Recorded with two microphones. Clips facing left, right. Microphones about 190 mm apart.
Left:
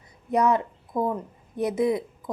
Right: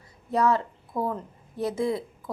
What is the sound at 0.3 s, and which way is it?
A woman's voice, 20° left (ahead or behind).